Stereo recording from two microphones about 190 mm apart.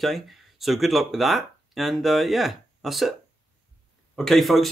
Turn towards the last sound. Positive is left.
turn(degrees=0)  # may be behind; listen again after turning